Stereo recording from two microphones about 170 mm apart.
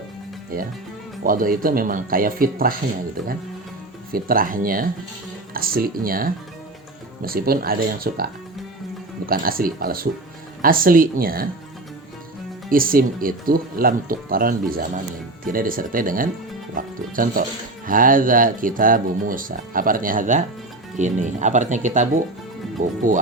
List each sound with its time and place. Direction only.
0.5 s speech: 60° right (ahead or behind)
4.1 s speech: 55° right (ahead or behind)
12.7 s speech: 55° right (ahead or behind)